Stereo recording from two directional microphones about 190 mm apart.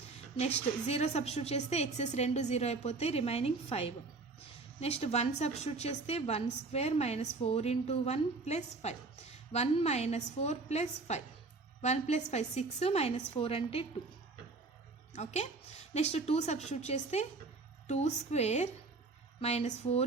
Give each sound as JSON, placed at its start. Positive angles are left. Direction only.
{"t": 0.3, "sound": "a woman's voice", "side_deg": 35}
{"t": 15.1, "sound": "a woman's voice", "side_deg": 35}